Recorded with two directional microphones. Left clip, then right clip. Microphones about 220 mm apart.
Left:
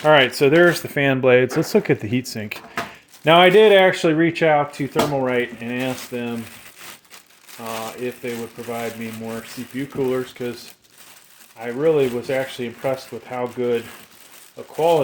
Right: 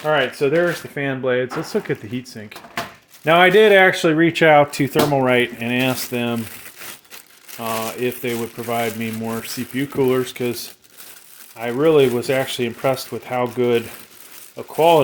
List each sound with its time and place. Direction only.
0.0 s speech: 50° left (ahead or behind)
3.2 s speech: 10° left (ahead or behind)
3.5 s speech: centre (ahead or behind)
4.4 s speech: 45° right (ahead or behind)
7.6 s speech: 55° right (ahead or behind)
11.5 s speech: 55° right (ahead or behind)